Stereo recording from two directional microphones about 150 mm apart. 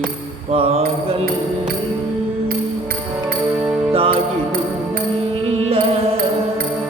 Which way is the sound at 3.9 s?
40° right (ahead or behind).